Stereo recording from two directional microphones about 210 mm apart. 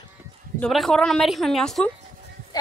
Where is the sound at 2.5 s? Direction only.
20° left (ahead or behind).